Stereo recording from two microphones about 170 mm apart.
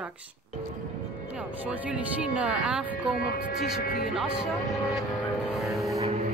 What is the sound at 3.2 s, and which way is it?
Speech, 60° left (ahead or behind).